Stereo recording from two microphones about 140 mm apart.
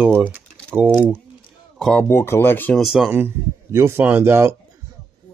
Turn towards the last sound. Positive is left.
turn(degrees=-15)  # may be behind; listen again after turning